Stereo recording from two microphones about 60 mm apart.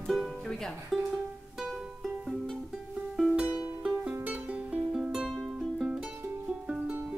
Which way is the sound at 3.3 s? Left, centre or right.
Right.